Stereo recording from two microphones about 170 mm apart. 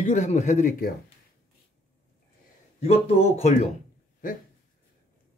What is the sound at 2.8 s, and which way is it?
Speech, 35° left (ahead or behind).